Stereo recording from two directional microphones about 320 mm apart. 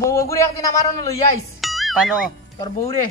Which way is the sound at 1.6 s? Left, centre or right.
Centre.